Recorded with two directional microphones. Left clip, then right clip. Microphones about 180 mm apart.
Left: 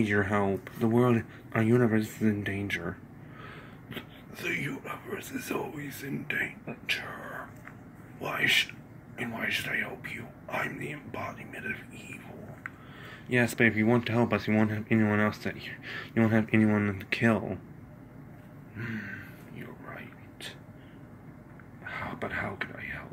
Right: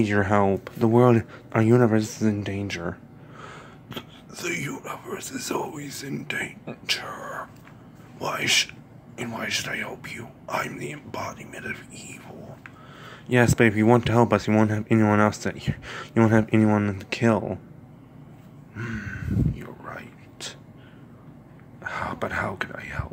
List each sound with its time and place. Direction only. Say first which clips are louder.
0.0 s speech: right 6 dB; 30° right (ahead or behind)
8.2 s speech: right 3 dB; 30° right (ahead or behind)
13.0 s speech: right 6 dB; 45° right (ahead or behind); by 17.6 s 25° right (ahead or behind)
18.8 s a sound: right 4 dB; 30° right (ahead or behind)
21.8 s speech: right 7 dB; 40° right (ahead or behind)